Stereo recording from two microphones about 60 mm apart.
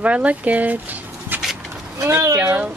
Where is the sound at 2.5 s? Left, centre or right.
Right.